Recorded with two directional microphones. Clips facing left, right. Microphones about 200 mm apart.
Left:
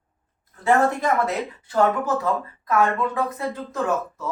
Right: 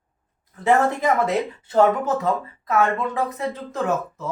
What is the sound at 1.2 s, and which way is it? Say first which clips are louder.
Speech: right 4 dB; 25° right (ahead or behind).